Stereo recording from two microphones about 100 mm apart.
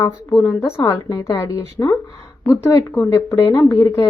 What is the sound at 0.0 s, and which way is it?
Speech, 35° left (ahead or behind).